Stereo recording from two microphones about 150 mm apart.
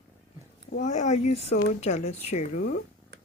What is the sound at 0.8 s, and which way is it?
Speech, 50° left (ahead or behind).